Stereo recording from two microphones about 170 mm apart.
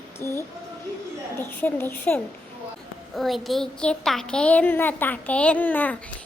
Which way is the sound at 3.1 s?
Centre (ahead or behind).